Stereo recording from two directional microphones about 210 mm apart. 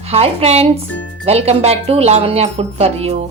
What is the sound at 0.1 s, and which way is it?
A woman's voice, 30° right (ahead or behind).